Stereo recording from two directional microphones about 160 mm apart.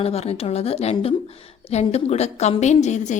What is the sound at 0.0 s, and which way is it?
A woman's voice, 40° left (ahead or behind).